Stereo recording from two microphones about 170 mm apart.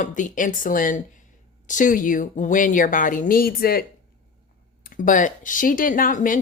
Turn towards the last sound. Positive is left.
turn(degrees=50)  # may be behind; listen again after turning